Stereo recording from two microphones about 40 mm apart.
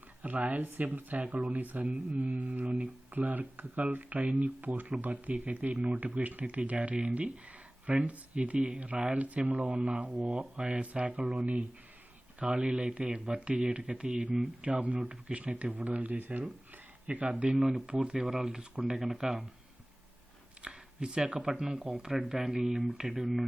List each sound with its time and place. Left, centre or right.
0.2 s speech: right
11.2 s speech: centre
12.4 s speech: right
17.8 s speech: right
18.2 s speech: centre
20.6 s speech: right; by 22.4 s centre
22.4 s speech: right
23.0 s speech: centre